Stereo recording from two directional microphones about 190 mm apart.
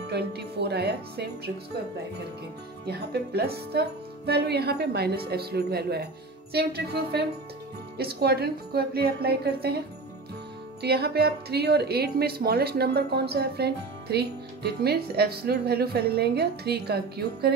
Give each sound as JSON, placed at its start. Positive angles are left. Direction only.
{"t": 0.1, "sound": "speech", "side_deg": -60}
{"t": 2.9, "sound": "speech", "side_deg": -55}
{"t": 10.8, "sound": "speech", "side_deg": -55}